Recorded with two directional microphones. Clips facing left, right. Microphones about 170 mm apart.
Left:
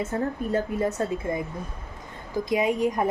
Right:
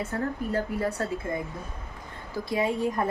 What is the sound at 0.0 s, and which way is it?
A woman's voice, 20° left (ahead or behind).